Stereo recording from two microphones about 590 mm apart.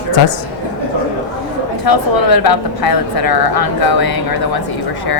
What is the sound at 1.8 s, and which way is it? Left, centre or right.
A woman's voice, left.